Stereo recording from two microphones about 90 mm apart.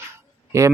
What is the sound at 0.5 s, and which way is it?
Speech, 35° right (ahead or behind).